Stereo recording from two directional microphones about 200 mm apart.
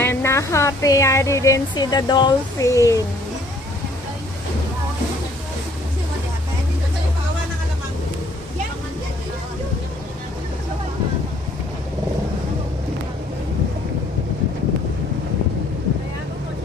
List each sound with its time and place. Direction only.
0.0 s speech: 10° left (ahead or behind)